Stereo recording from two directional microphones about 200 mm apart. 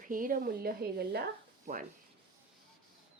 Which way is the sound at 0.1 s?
45° right (ahead or behind).